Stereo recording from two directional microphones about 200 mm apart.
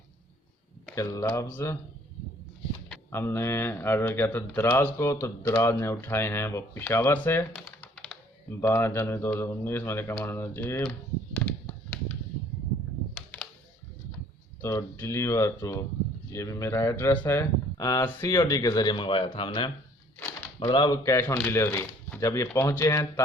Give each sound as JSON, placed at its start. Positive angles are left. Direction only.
{"t": 0.9, "sound": "speech", "side_deg": 15}
{"t": 2.9, "sound": "speech", "side_deg": 10}
{"t": 7.5, "sound": "speech", "side_deg": 0}
{"t": 11.3, "sound": "a sound", "side_deg": 5}
{"t": 13.1, "sound": "computer keyboard", "side_deg": 5}
{"t": 14.6, "sound": "speech", "side_deg": 15}